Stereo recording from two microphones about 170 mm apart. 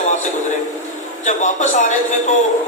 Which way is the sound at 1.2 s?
45° left (ahead or behind).